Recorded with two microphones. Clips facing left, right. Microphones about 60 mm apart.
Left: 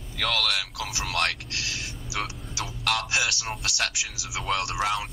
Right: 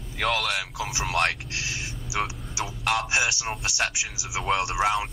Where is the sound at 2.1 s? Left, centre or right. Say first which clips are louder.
Right 3 dB; centre.